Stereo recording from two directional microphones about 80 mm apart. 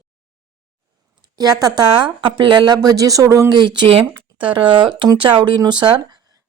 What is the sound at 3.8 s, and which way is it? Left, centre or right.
Speech, right.